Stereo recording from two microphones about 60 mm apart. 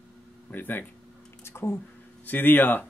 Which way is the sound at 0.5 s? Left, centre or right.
Left.